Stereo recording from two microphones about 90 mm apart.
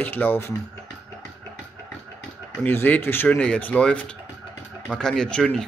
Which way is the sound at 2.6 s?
20° left (ahead or behind).